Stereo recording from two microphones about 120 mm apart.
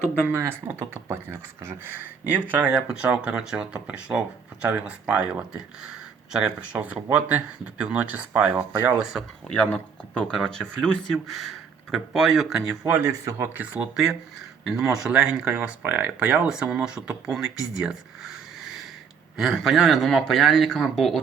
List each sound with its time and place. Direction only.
0.3 s speech: 20° right (ahead or behind)
9.5 s speech: 10° left (ahead or behind)
12.9 s speech: 25° right (ahead or behind); by 18.3 s 5° right (ahead or behind)
19.4 s speech: centre (ahead or behind)